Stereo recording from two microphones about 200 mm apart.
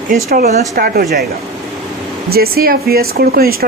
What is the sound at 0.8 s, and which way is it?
Speech, 45° right (ahead or behind).